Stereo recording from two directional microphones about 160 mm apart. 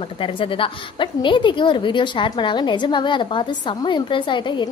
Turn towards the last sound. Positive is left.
turn(degrees=30)  # may be behind; listen again after turning